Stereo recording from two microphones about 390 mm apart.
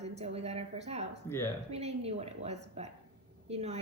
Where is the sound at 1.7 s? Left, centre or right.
Centre.